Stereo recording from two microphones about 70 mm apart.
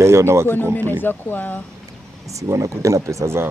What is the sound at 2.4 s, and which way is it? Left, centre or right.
Speech, right.